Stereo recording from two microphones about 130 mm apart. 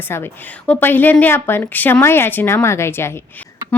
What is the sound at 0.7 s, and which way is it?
A woman's voice, 15° left (ahead or behind).